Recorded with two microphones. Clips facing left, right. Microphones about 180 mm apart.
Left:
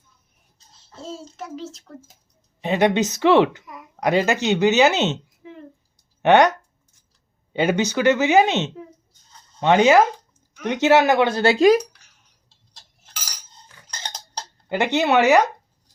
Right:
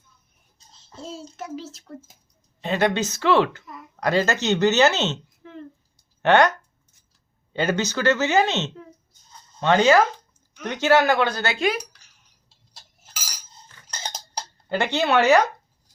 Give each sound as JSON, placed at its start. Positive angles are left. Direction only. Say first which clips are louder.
{"t": 1.0, "sound": "a child's voice", "louder": "left 1 dB", "side_deg": 0}
{"t": 2.6, "sound": "speech", "louder": "left 3 dB", "side_deg": 15}
{"t": 7.5, "sound": "a woman's voice", "louder": "left 3 dB", "side_deg": 15}
{"t": 14.0, "sound": "a sound", "louder": "right 1 dB", "side_deg": -5}
{"t": 14.7, "sound": "speech", "louder": "left 2 dB", "side_deg": 15}